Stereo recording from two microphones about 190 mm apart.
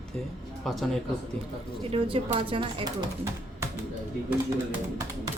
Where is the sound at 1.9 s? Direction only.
30° right (ahead or behind).